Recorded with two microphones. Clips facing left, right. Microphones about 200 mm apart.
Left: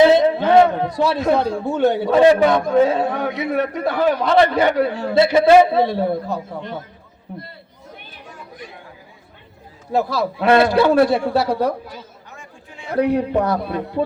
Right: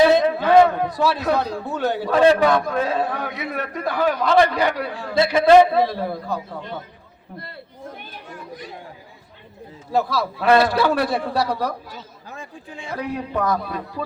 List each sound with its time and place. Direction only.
0.0 s a man's voice: 25° left (ahead or behind)
10.3 s a man's voice: 25° left (ahead or behind)
12.4 s a sound: 30° right (ahead or behind)
13.3 s a man's voice: 30° left (ahead or behind)